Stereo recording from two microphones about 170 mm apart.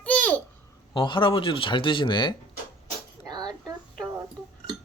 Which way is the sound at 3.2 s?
25° right (ahead or behind).